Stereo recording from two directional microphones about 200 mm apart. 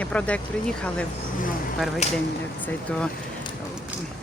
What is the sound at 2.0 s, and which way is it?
Speech, 35° left (ahead or behind).